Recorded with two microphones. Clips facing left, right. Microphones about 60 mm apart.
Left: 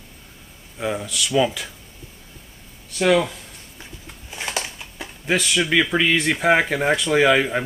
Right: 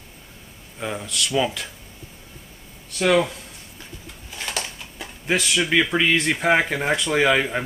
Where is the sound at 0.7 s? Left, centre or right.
Centre.